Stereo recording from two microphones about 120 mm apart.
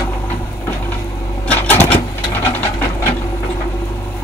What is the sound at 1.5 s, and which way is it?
Sewing machine, 15° left (ahead or behind).